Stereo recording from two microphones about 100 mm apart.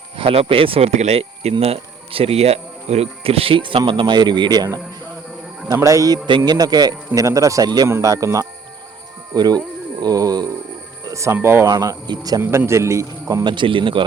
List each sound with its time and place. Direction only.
0.2 s speech: 65° right (ahead or behind)
3.8 s speech: 50° right (ahead or behind)
5.7 s speech: 30° right (ahead or behind)
6.2 s speech: 50° right (ahead or behind)
7.9 s speech: 30° right (ahead or behind)
11.0 s music: 30° right (ahead or behind)
11.3 s speech: 25° right (ahead or behind)
11.7 s speech: 35° right (ahead or behind)
12.4 s speech: 25° right (ahead or behind)
13.4 s speech: 55° right (ahead or behind)